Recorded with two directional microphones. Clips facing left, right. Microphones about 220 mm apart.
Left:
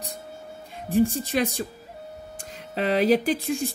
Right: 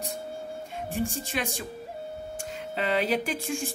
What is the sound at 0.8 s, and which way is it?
Speech, 35° left (ahead or behind).